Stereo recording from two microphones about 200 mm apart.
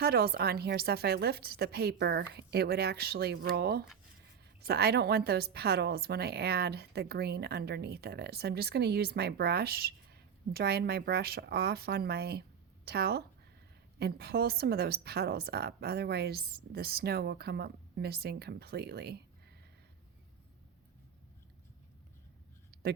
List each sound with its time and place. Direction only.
0.0 s a woman's voice: 50° right (ahead or behind)